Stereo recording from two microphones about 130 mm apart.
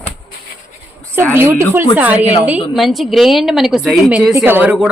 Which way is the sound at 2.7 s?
Centre (ahead or behind).